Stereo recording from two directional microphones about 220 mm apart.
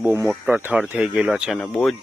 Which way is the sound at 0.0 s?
5° right (ahead or behind).